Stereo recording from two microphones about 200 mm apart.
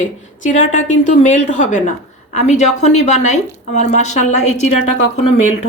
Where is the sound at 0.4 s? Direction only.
40° left (ahead or behind).